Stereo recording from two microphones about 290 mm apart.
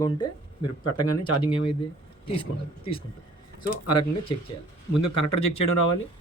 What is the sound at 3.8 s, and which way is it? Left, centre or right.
Speech, left.